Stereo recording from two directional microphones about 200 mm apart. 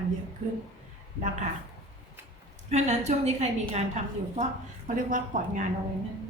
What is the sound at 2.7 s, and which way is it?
A woman's voice, 35° right (ahead or behind).